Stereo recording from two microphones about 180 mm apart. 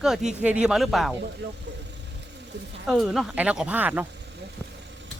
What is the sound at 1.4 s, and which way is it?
Speech, 70° right (ahead or behind).